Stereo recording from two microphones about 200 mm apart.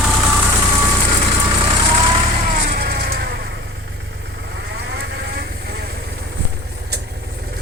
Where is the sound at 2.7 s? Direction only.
50° right (ahead or behind).